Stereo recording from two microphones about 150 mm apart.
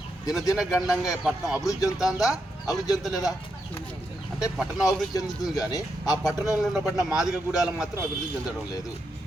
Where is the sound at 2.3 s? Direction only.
25° left (ahead or behind).